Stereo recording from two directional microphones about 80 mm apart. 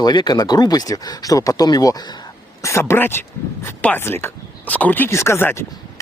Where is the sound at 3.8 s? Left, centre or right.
Centre.